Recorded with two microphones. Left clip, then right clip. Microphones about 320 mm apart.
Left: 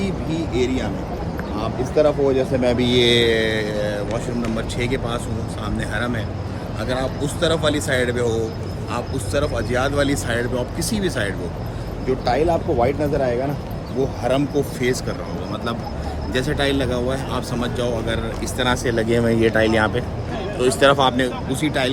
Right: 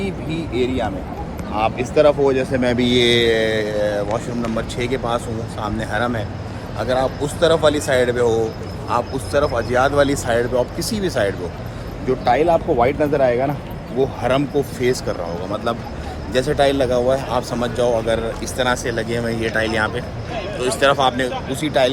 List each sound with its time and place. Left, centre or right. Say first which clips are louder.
0.5 s speech: right 3 dB; centre
2.0 s speech: right 3 dB; right; by 11.3 s centre
12.0 s speech: right 3 dB; centre
14.8 s speech: right 2 dB; centre
16.3 s a man's voice: right 5 dB; centre
18.5 s speech: even; centre